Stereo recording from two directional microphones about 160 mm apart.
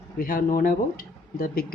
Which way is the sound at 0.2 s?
60° left (ahead or behind).